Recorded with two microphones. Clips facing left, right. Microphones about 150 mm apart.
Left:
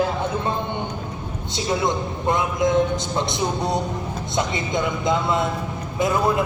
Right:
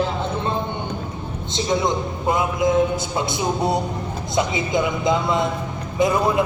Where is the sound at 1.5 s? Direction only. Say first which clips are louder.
Right 2 dB; 5° left (ahead or behind).